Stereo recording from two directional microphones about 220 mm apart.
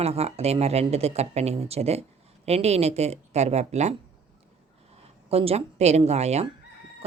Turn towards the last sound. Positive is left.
turn(degrees=-30)  # may be behind; listen again after turning